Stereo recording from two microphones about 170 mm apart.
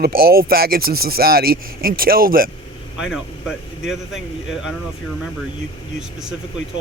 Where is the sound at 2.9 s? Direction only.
5° right (ahead or behind).